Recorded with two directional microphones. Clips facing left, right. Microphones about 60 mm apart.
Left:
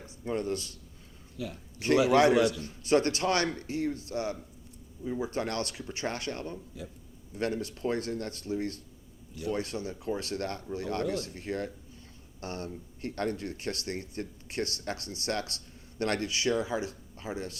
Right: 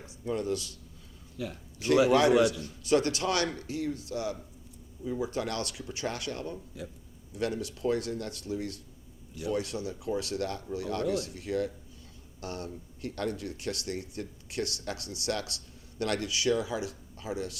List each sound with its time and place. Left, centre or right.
0.3 s speech: left
2.1 s speech: left
6.8 s speech: right
7.3 s speech: left